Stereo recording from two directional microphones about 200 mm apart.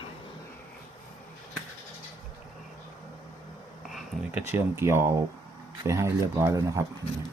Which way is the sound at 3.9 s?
10° right (ahead or behind).